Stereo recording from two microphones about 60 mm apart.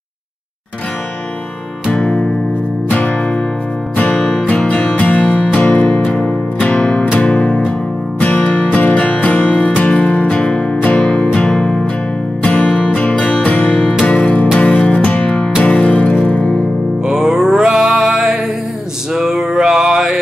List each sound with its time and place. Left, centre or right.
1.9 s music: centre
4.5 s music: left
15.2 s music: centre
17.0 s music: centre